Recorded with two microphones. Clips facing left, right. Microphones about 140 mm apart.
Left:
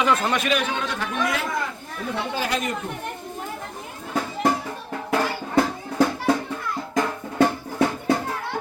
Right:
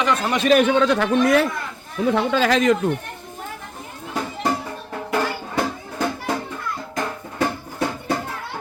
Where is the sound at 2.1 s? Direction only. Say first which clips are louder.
Right 8 dB; 90° right.